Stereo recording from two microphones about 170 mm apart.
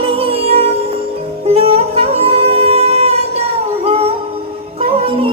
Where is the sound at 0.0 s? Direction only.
35° right (ahead or behind).